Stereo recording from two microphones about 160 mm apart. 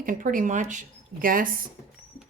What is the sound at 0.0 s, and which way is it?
Speech, 60° right (ahead or behind).